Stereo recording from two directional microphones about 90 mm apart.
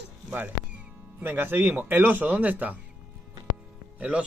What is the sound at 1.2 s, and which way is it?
Speech, 25° right (ahead or behind).